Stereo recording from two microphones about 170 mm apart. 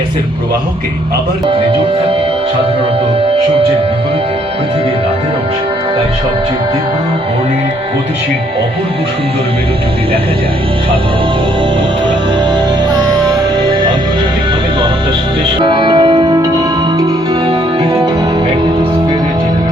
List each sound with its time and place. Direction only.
15.6 s music: 30° right (ahead or behind)